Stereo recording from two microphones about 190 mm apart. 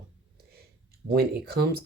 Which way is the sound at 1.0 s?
55° right (ahead or behind).